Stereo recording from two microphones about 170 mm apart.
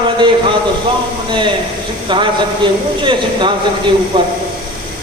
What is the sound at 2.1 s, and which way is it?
A man's voice, 30° right (ahead or behind).